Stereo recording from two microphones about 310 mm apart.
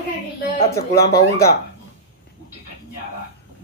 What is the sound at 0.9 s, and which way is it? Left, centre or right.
Speech, left.